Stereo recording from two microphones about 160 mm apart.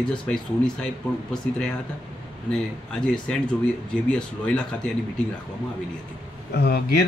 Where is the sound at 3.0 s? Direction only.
5° left (ahead or behind).